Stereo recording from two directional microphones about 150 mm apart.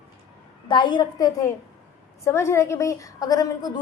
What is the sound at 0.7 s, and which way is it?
Speech, 30° left (ahead or behind).